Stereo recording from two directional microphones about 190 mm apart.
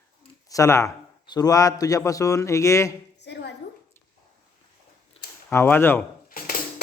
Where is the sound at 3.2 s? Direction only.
65° left (ahead or behind).